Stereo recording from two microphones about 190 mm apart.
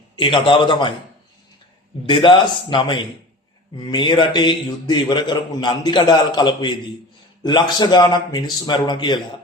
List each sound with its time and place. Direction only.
0.2 s a man's voice: 25° left (ahead or behind)
2.0 s a man's voice: 25° left (ahead or behind)